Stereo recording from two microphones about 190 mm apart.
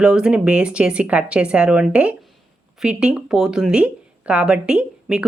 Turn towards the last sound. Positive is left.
turn(degrees=-5)  # may be behind; listen again after turning